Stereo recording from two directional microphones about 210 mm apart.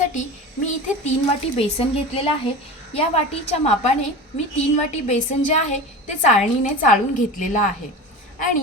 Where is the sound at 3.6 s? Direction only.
30° left (ahead or behind).